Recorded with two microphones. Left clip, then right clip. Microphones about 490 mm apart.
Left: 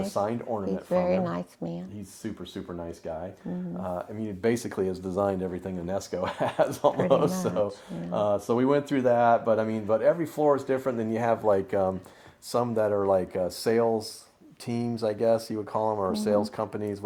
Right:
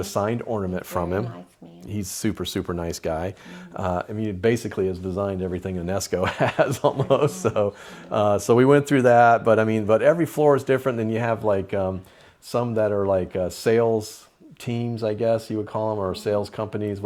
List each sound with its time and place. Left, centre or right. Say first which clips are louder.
0.1 s speech: right 6 dB; right
2.2 s speech: right 10 dB; right; by 17.0 s centre